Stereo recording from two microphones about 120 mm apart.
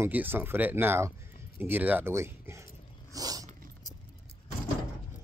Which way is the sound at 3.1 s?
30° right (ahead or behind).